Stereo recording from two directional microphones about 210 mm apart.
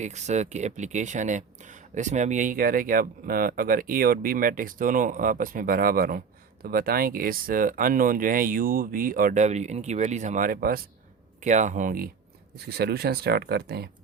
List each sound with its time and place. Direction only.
0.0 s speech: 35° right (ahead or behind); by 13.9 s 50° right (ahead or behind)